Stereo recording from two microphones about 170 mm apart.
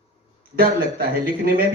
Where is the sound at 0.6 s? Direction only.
60° right (ahead or behind).